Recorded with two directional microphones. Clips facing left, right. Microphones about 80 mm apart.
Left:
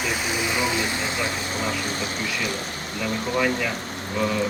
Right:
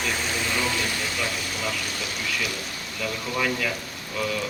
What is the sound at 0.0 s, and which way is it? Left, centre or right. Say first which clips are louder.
Vehicle: left 2 dB; centre.